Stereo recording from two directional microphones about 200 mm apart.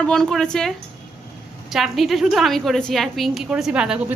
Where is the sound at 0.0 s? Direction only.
5° left (ahead or behind).